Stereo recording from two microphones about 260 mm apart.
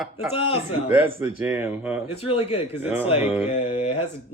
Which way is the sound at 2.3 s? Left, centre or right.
Left.